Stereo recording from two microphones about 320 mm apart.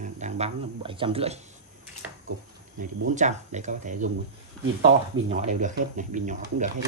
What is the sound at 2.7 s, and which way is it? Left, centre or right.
Speech, right.